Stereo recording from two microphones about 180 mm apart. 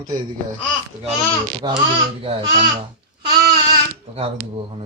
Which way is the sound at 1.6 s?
25° right (ahead or behind).